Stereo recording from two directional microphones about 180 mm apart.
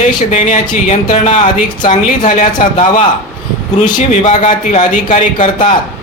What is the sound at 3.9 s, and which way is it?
Speech, 45° left (ahead or behind).